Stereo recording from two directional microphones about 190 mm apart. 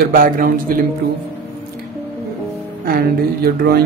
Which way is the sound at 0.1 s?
45° right (ahead or behind).